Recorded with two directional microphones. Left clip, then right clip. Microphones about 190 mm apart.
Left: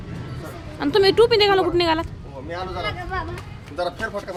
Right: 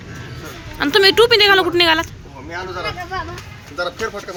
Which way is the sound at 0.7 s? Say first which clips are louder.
Right 4 dB; centre (ahead or behind).